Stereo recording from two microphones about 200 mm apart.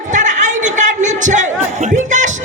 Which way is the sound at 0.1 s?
40° right (ahead or behind).